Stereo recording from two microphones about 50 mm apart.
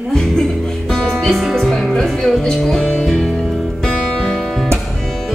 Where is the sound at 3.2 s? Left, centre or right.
Centre.